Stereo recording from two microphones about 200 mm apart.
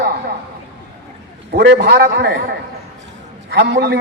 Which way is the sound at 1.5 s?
55° right (ahead or behind).